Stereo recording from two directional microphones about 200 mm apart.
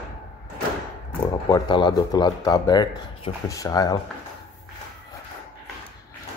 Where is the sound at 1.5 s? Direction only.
20° left (ahead or behind).